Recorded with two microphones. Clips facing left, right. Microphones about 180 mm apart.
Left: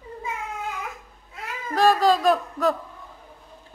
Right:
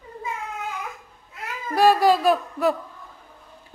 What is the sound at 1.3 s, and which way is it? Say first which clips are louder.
Speech: right 1 dB; 10° right (ahead or behind).